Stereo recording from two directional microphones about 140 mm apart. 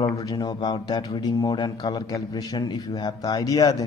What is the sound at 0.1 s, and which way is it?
Speech, 25° left (ahead or behind).